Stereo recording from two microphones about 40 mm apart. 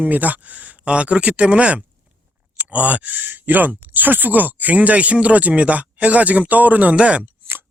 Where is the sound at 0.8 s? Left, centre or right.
Right.